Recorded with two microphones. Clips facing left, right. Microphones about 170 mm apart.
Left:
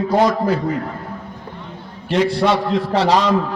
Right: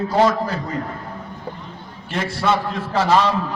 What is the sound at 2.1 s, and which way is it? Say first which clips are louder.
Speech: left 9 dB; 65° left (ahead or behind).